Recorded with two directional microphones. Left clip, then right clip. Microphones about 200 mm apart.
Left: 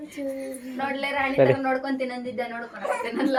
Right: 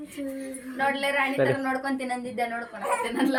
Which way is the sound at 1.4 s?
10° left (ahead or behind).